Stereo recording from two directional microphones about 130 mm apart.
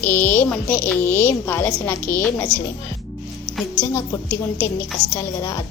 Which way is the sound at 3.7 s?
20° left (ahead or behind).